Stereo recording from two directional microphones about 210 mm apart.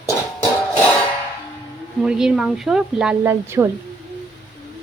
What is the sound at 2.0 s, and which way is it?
A woman's voice, centre (ahead or behind).